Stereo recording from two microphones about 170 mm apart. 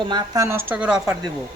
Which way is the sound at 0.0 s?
25° right (ahead or behind).